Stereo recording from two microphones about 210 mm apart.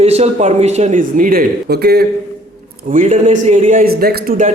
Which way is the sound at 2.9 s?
35° right (ahead or behind).